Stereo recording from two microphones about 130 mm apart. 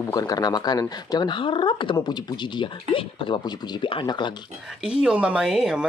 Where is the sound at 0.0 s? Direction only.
25° left (ahead or behind).